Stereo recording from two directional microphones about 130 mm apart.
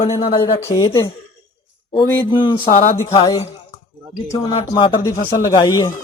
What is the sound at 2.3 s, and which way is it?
Speech, 35° left (ahead or behind).